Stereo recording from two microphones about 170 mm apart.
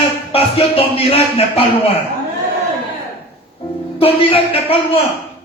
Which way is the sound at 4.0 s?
35° left (ahead or behind).